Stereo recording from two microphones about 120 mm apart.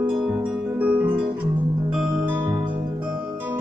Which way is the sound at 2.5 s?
40° right (ahead or behind).